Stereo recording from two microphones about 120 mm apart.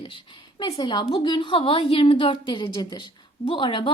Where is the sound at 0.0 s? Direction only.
45° left (ahead or behind).